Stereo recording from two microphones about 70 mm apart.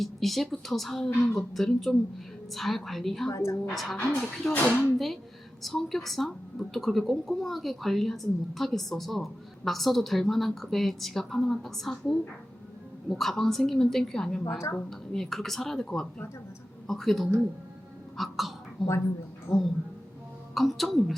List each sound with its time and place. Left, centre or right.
0.0 s a woman's voice: centre
3.2 s a woman's voice: left
3.7 s a woman's voice: centre
4.6 s speech: left
5.6 s a woman's voice: centre
18.2 s a sound: centre
19.5 s a woman's voice: left
20.5 s a woman's voice: centre